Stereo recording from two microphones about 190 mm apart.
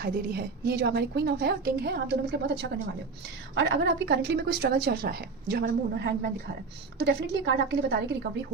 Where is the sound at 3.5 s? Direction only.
60° right (ahead or behind).